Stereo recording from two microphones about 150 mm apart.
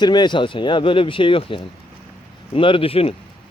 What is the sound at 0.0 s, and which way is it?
Speech, 30° left (ahead or behind).